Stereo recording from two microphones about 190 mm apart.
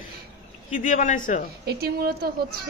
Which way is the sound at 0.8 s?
40° left (ahead or behind).